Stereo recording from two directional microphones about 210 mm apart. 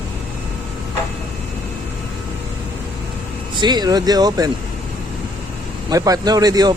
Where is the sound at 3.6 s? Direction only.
20° right (ahead or behind).